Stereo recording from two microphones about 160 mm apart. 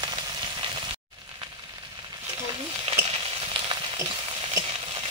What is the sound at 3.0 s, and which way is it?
Frying, 35° right (ahead or behind).